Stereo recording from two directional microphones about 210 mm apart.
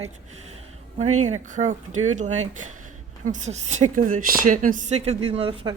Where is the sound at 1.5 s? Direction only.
35° right (ahead or behind).